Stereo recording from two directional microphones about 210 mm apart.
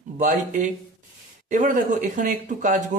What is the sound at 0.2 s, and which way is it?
Speech, 35° right (ahead or behind).